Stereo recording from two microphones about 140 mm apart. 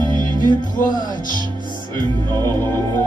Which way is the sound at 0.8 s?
70° left (ahead or behind).